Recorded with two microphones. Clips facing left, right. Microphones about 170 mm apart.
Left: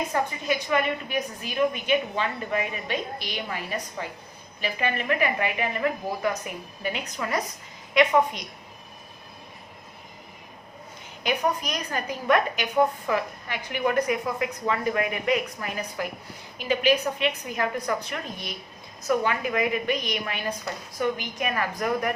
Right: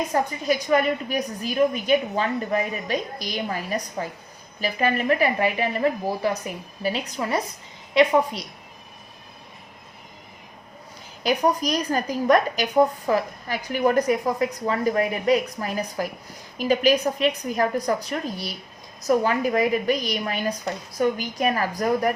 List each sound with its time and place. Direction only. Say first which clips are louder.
0.1 s a woman's voice: right 3 dB; 40° right (ahead or behind)
11.2 s a woman's voice: right 4 dB; 35° right (ahead or behind)